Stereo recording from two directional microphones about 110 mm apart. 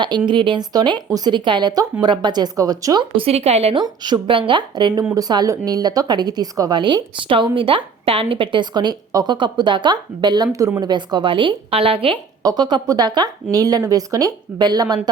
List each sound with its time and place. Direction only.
0.3 s a woman's voice: 45° right (ahead or behind)
3.2 s a woman's voice: 70° right (ahead or behind)
3.8 s a woman's voice: 40° right (ahead or behind)
12.4 s a woman's voice: 35° right (ahead or behind)